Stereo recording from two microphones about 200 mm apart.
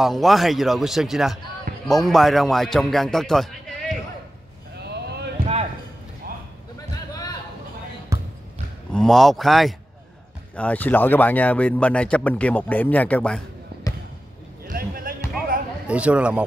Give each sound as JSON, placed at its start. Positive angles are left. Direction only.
{"t": 0.0, "sound": "a man's voice", "side_deg": 0}
{"t": 4.8, "sound": "a sound", "side_deg": -55}
{"t": 8.1, "sound": "basketball bounce", "side_deg": -15}
{"t": 8.9, "sound": "a man's voice", "side_deg": 0}
{"t": 14.7, "sound": "music", "side_deg": -45}
{"t": 15.9, "sound": "a man's voice", "side_deg": -5}